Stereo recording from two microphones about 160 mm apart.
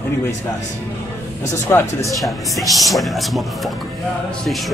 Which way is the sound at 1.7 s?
15° left (ahead or behind).